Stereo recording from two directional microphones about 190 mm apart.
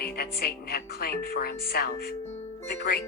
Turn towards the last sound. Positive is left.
turn(degrees=55)  # may be behind; listen again after turning